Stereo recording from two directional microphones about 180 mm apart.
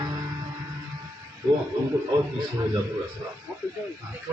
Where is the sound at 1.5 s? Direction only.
20° right (ahead or behind).